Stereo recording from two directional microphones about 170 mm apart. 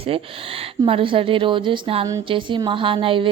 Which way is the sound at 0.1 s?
35° right (ahead or behind).